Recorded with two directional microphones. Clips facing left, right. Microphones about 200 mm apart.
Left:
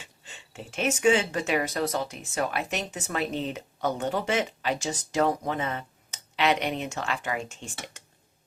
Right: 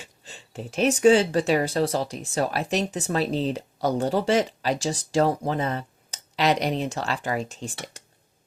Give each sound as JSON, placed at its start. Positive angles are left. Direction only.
{"t": 0.0, "sound": "speech", "side_deg": -35}